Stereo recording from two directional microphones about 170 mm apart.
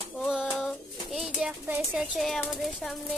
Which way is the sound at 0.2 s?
5° left (ahead or behind).